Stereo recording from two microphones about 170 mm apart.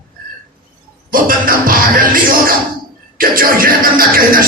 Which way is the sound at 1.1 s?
55° right (ahead or behind).